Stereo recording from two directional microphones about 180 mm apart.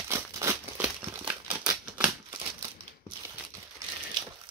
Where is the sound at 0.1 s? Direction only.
15° right (ahead or behind).